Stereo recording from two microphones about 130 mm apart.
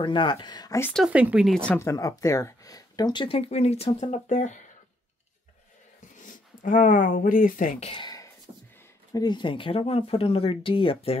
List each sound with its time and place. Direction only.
0.0 s speech: 35° left (ahead or behind)
0.9 s speech: 5° right (ahead or behind)
1.5 s speech: 10° left (ahead or behind)
1.8 s speech: 25° left (ahead or behind); by 4.6 s 70° left (ahead or behind)
6.2 s speech: 90° left
7.9 s a sound: 35° left (ahead or behind)
9.1 s speech: 35° left (ahead or behind)